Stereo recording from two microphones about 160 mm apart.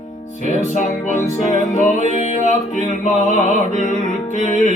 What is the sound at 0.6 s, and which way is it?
Music, 50° left (ahead or behind).